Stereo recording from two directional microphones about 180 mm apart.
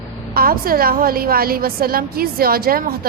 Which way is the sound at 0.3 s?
55° right (ahead or behind).